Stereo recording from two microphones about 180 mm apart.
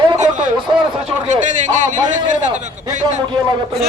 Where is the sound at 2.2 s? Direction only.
40° right (ahead or behind).